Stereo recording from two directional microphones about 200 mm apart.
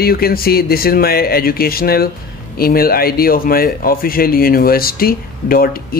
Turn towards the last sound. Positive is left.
turn(degrees=45)  # may be behind; listen again after turning